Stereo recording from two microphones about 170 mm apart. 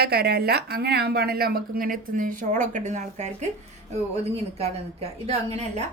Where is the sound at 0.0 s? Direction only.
70° right (ahead or behind).